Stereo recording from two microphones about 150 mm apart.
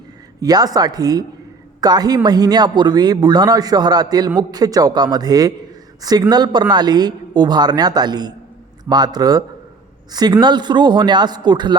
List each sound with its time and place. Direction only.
0.4 s speech: 25° right (ahead or behind)